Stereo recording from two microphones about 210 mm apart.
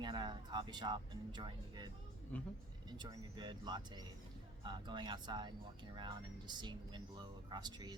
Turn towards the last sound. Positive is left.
turn(degrees=-20)  # may be behind; listen again after turning